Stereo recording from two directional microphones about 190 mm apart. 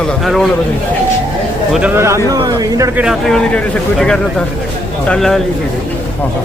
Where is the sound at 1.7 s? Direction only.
5° right (ahead or behind).